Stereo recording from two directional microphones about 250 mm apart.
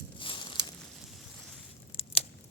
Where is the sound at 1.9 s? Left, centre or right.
Left.